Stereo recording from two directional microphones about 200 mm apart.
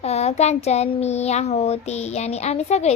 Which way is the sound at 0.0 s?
30° left (ahead or behind).